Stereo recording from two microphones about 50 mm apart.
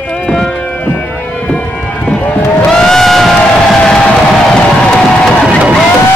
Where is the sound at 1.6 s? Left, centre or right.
Centre.